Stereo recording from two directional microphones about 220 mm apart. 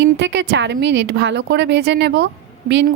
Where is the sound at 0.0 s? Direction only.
55° right (ahead or behind).